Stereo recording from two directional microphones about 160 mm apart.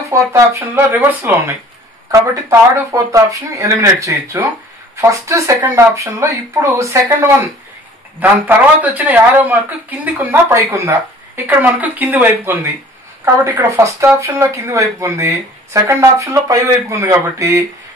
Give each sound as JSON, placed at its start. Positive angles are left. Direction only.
{"t": 0.1, "sound": "speech", "side_deg": -15}
{"t": 2.9, "sound": "speech", "side_deg": -20}